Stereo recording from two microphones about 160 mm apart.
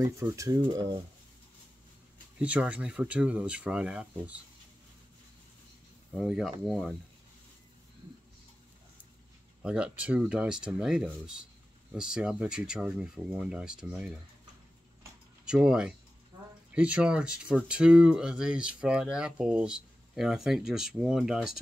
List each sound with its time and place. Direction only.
0.0 s speech: 20° right (ahead or behind)
2.3 s speech: 10° right (ahead or behind)
6.1 s speech: 5° right (ahead or behind)
9.6 s speech: 5° right (ahead or behind)
15.4 s speech: 5° right (ahead or behind)